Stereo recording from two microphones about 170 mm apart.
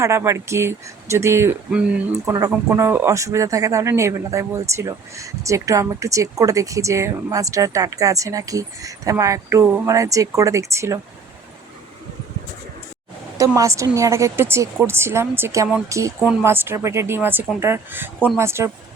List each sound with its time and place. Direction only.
0.0 s a woman's voice: 15° right (ahead or behind)
13.6 s a woman's voice: 20° right (ahead or behind)